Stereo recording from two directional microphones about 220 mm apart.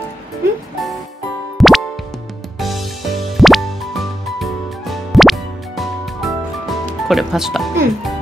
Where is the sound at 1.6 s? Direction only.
Centre (ahead or behind).